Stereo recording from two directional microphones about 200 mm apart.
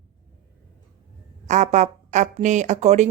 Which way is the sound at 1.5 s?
35° right (ahead or behind).